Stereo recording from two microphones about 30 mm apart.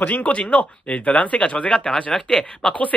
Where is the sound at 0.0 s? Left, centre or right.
Left.